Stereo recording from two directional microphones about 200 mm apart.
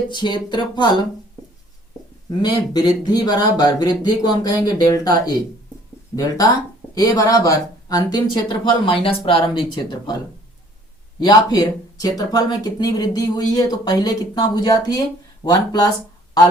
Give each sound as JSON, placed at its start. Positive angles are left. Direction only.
{"t": 0.1, "sound": "speech", "side_deg": 25}
{"t": 2.4, "sound": "speech", "side_deg": 20}
{"t": 11.2, "sound": "speech", "side_deg": 20}